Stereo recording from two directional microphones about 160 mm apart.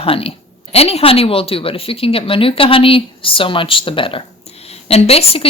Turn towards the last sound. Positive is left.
turn(degrees=40)  # may be behind; listen again after turning